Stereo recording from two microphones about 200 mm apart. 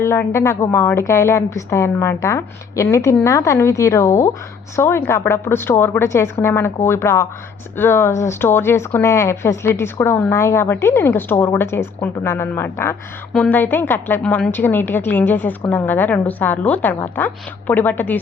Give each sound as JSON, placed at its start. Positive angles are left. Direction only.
{"t": 0.0, "sound": "speech", "side_deg": 15}